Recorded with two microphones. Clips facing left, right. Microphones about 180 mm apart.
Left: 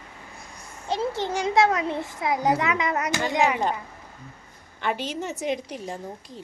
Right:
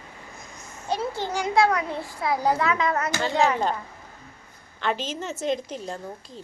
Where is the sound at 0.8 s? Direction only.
20° left (ahead or behind).